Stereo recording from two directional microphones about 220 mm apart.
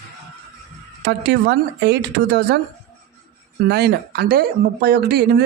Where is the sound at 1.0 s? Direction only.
50° right (ahead or behind).